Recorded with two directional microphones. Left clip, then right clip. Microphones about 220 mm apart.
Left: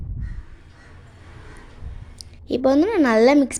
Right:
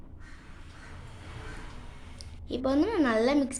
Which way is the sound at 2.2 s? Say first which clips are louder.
Left 11 dB; 35° left (ahead or behind).